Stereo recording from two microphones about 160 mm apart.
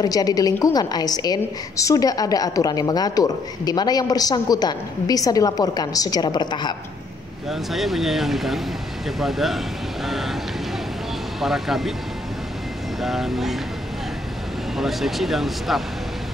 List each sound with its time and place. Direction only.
0.0 s a woman's voice: 25° left (ahead or behind)
7.7 s speech: centre (ahead or behind)
11.4 s speech: centre (ahead or behind)
13.0 s speech: centre (ahead or behind)
14.8 s speech: centre (ahead or behind)